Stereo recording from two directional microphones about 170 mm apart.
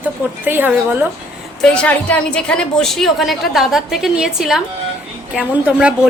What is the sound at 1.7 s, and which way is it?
A woman's voice, 10° left (ahead or behind).